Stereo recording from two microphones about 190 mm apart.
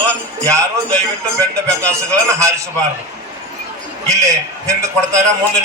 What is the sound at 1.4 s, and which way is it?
A man's voice, 15° right (ahead or behind).